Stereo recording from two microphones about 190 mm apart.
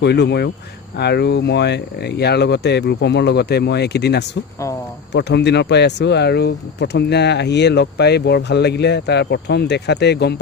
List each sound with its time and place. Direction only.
0.0 s speech: 60° left (ahead or behind)